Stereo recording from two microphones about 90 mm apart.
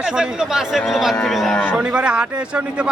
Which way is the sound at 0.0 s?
5° right (ahead or behind).